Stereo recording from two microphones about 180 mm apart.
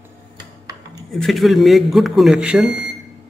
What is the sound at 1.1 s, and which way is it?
Speech, centre (ahead or behind).